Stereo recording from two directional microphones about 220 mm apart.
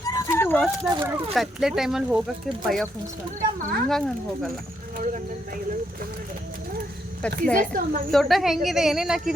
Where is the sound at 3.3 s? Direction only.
35° right (ahead or behind).